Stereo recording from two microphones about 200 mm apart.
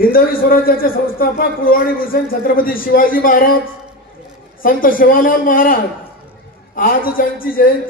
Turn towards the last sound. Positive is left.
turn(degrees=45)  # may be behind; listen again after turning